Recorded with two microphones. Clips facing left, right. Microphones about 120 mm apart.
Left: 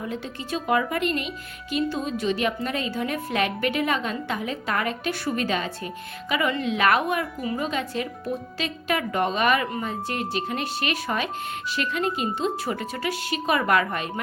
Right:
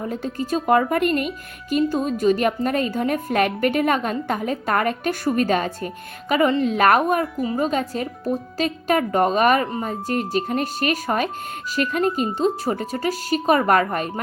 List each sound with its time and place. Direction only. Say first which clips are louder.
0.0 s a woman's voice: right 6 dB; 45° right (ahead or behind)